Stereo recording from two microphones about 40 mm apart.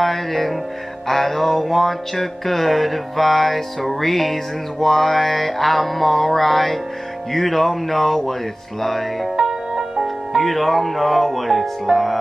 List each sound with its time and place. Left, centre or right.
0.0 s music: centre
9.4 s music: centre
10.0 s speech: centre
11.8 s music: centre